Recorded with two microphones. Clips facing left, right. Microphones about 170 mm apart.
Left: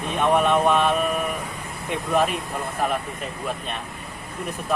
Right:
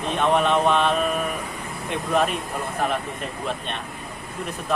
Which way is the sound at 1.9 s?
Centre (ahead or behind).